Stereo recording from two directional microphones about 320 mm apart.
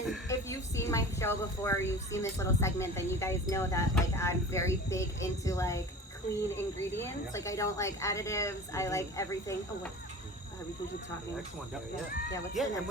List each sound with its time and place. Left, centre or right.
0.0 s speech: centre
12.6 s speech: centre